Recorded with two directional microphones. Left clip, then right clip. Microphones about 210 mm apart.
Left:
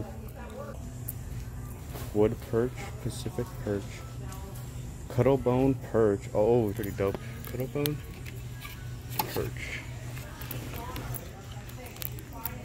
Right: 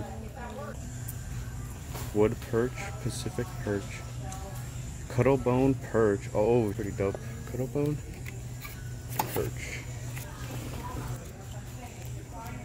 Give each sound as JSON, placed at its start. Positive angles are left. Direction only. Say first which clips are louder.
{"t": 2.1, "sound": "speech", "louder": "even", "side_deg": 0}
{"t": 5.1, "sound": "speech", "louder": "even", "side_deg": 5}
{"t": 7.5, "sound": "speech", "louder": "right 1 dB", "side_deg": -15}
{"t": 9.1, "sound": "chopping", "louder": "right 1 dB", "side_deg": -15}